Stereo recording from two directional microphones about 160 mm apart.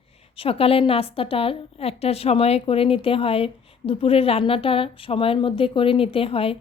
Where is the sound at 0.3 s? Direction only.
35° left (ahead or behind).